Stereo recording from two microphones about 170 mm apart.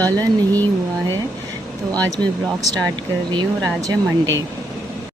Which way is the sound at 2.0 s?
20° right (ahead or behind).